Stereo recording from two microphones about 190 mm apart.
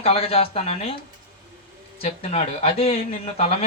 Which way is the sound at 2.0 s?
35° left (ahead or behind).